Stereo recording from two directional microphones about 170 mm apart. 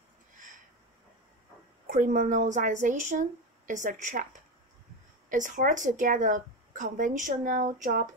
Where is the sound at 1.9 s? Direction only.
50° right (ahead or behind).